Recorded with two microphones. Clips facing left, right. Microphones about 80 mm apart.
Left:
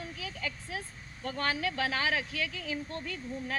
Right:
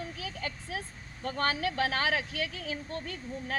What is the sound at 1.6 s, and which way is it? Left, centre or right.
Speech, right.